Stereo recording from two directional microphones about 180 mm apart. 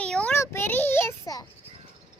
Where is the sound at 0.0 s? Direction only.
5° left (ahead or behind).